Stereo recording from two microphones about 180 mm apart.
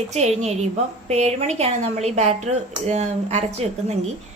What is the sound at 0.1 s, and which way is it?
A woman's voice, 35° right (ahead or behind).